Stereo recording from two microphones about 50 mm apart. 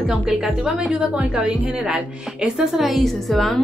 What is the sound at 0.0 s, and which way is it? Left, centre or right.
Speech, centre.